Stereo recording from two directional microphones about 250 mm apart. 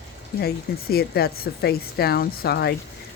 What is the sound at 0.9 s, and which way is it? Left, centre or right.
Speech, left.